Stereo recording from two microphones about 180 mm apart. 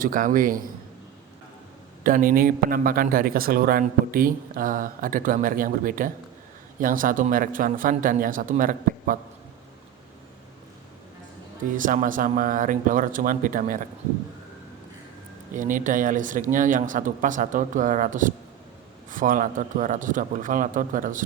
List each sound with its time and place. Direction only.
0.0 s speech: 50° right (ahead or behind)
2.0 s speech: 50° right (ahead or behind)
11.8 s speech: 50° right (ahead or behind)
15.5 s speech: 45° right (ahead or behind)